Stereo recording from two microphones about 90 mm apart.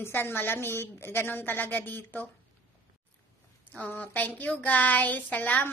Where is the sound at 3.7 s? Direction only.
15° left (ahead or behind).